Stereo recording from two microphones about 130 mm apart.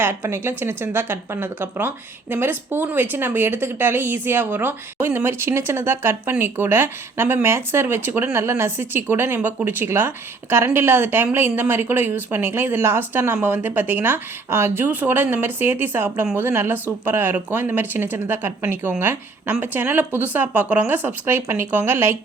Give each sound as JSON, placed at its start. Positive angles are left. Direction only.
{"t": 0.0, "sound": "speech", "side_deg": -20}